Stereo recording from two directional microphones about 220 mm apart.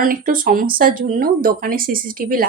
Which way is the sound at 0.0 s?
40° right (ahead or behind).